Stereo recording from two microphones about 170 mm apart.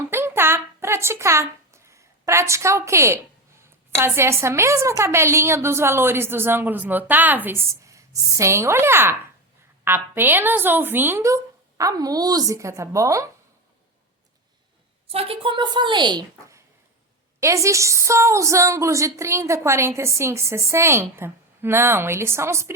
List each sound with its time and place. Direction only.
0.1 s a sound: 15° right (ahead or behind)
3.9 s a woman's voice: 15° right (ahead or behind)
15.1 s a woman's voice: 35° right (ahead or behind); by 22.7 s 15° right (ahead or behind)